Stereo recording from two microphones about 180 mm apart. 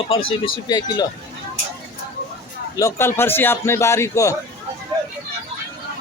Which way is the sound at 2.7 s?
15° left (ahead or behind).